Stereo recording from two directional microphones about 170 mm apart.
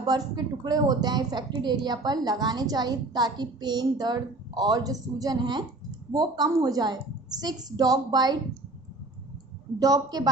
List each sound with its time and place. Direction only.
0.0 s a woman's voice: 25° right (ahead or behind)
9.7 s a woman's voice: 20° right (ahead or behind)